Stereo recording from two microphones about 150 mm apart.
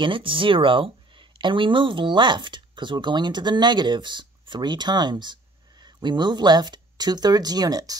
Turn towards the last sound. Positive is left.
turn(degrees=-25)  # may be behind; listen again after turning